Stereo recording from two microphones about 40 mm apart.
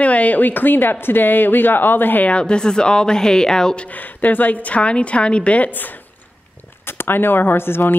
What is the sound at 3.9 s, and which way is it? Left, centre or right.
A woman's voice, left.